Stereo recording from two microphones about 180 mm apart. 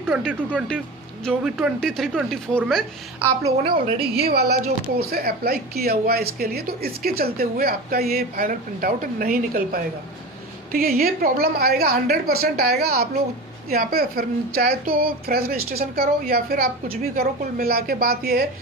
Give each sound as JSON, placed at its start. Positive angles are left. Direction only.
{"t": 0.0, "sound": "speech", "side_deg": 5}
{"t": 3.2, "sound": "a woman's voice", "side_deg": -15}
{"t": 3.6, "sound": "a woman's voice", "side_deg": -30}
{"t": 4.1, "sound": "speech", "side_deg": -60}